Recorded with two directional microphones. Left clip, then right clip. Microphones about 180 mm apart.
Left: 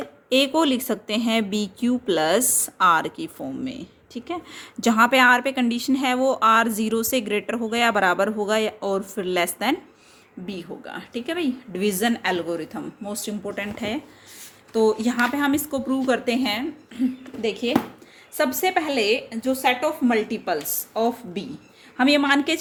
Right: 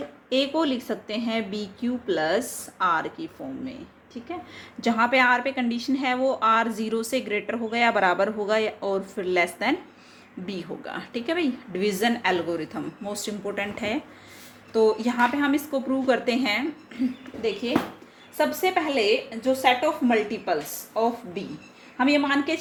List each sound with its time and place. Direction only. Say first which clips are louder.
0.3 s speech: left 4 dB; 40° left (ahead or behind)
10.4 s a woman's voice: even; 15° left (ahead or behind)
14.7 s speech: left 1 dB; 30° left (ahead or behind)
16.0 s a woman's voice: even; 25° left (ahead or behind)
17.4 s a woman's voice: left 2 dB; 45° left (ahead or behind)